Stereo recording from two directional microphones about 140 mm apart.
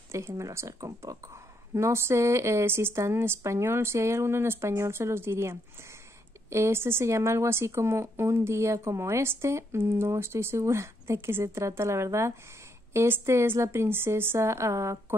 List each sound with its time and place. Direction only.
0.1 s a woman's voice: 20° right (ahead or behind)